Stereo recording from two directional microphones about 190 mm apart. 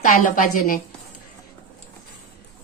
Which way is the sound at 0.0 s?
40° left (ahead or behind).